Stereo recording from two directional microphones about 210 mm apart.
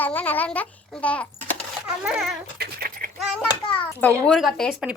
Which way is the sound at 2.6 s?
45° right (ahead or behind).